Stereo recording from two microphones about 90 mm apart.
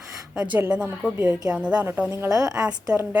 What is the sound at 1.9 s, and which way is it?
Speech, 25° right (ahead or behind).